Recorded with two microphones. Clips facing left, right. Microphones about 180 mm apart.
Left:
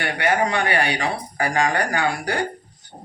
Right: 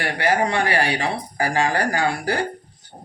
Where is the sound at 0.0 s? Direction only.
30° right (ahead or behind).